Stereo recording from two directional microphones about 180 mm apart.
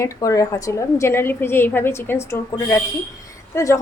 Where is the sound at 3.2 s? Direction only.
15° left (ahead or behind).